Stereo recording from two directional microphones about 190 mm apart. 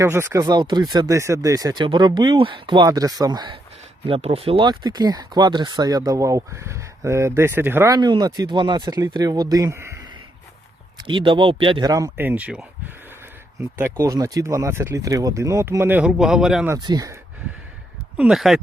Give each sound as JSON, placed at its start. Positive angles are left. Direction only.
{"t": 0.0, "sound": "speech", "side_deg": -15}
{"t": 11.0, "sound": "speech", "side_deg": -25}
{"t": 14.0, "sound": "speech", "side_deg": -20}
{"t": 16.6, "sound": "speech", "side_deg": -20}
{"t": 18.2, "sound": "speech", "side_deg": 0}